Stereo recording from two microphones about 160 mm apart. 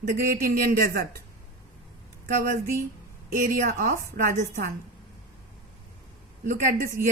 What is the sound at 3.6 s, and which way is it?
Speech, 55° right (ahead or behind).